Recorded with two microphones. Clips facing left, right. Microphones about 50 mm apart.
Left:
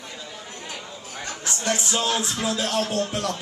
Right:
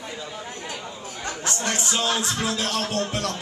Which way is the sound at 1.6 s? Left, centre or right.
Right.